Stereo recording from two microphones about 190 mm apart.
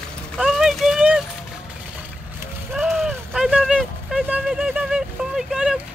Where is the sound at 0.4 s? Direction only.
Centre (ahead or behind).